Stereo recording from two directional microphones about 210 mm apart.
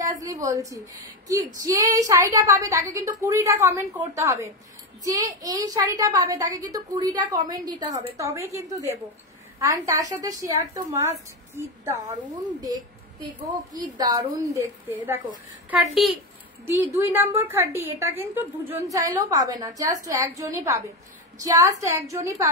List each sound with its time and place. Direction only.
0.0 s a woman's voice: 15° right (ahead or behind)
13.5 s speech: 20° right (ahead or behind)
15.7 s a woman's voice: centre (ahead or behind)
16.6 s speech: 10° right (ahead or behind)